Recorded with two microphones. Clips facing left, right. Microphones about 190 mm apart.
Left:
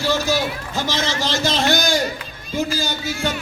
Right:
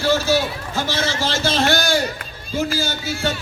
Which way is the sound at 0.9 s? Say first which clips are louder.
Even; 15° left (ahead or behind).